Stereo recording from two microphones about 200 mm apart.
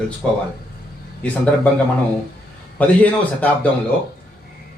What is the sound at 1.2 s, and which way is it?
Speech, 5° left (ahead or behind).